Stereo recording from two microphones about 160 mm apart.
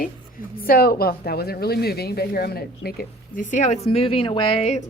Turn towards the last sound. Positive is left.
turn(degrees=40)  # may be behind; listen again after turning